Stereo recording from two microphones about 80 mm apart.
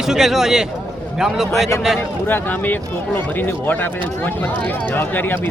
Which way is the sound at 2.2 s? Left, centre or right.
Left.